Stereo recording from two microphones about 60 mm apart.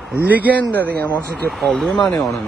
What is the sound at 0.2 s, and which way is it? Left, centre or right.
Speech, right.